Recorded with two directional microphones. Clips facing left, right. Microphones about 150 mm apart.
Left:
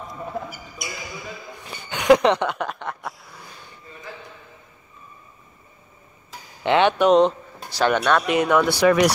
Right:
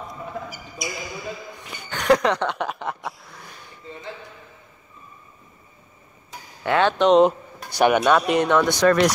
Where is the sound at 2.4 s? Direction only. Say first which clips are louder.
Even; centre (ahead or behind).